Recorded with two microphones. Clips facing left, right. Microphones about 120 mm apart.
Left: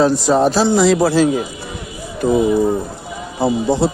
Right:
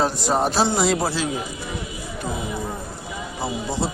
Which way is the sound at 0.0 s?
90° left.